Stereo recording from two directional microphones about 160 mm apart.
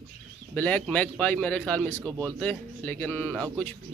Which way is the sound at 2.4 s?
10° left (ahead or behind).